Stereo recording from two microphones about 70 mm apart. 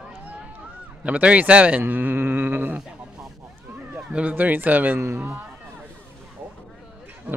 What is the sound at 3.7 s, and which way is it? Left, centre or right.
Speech, right.